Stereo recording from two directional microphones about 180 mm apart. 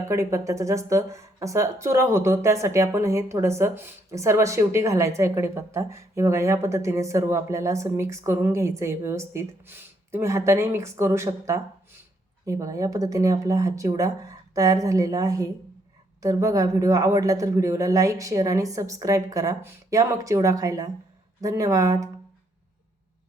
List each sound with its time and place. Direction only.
0.1 s speech: 15° right (ahead or behind)